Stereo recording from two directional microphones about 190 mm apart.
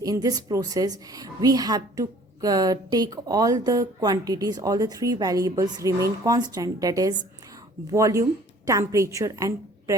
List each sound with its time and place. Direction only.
0.0 s a woman's voice: 20° right (ahead or behind)